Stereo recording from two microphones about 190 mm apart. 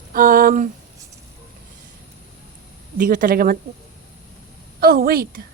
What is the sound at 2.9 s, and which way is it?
Speech, 45° right (ahead or behind).